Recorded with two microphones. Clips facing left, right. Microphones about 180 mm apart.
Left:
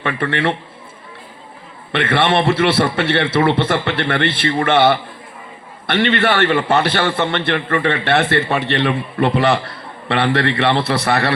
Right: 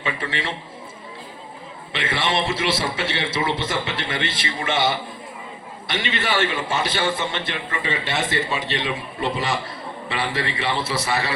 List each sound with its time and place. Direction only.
0.0 s a man's voice: 60° left (ahead or behind)
1.9 s a man's voice: 60° left (ahead or behind)